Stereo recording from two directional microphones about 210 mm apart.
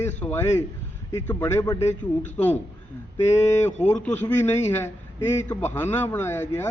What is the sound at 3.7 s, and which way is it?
Speech, 35° left (ahead or behind).